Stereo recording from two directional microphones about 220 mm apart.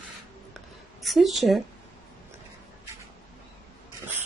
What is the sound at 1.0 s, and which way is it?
Speech, centre (ahead or behind).